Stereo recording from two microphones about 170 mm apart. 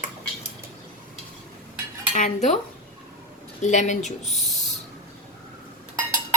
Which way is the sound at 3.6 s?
45° left (ahead or behind).